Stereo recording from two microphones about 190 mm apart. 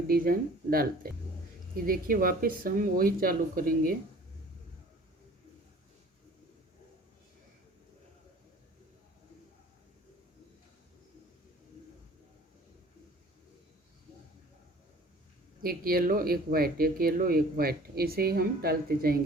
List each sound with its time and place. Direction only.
0.1 s speech: 50° right (ahead or behind)
15.6 s speech: 50° right (ahead or behind)